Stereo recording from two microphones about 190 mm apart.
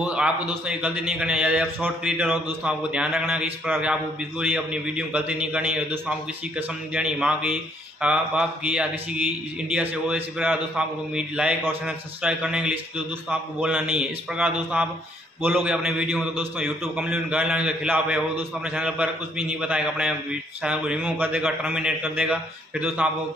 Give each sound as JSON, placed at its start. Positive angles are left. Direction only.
{"t": 0.0, "sound": "a man's voice", "side_deg": -5}